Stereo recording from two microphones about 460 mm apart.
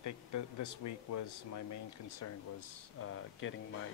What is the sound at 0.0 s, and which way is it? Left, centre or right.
Speech, left.